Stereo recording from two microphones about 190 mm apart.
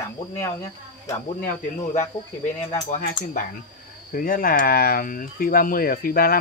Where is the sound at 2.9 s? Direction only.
40° left (ahead or behind).